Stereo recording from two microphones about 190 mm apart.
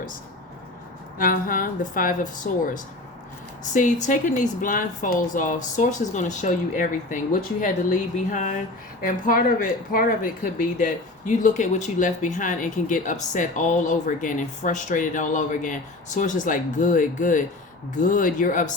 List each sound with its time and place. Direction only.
1.2 s a woman's voice: 50° left (ahead or behind)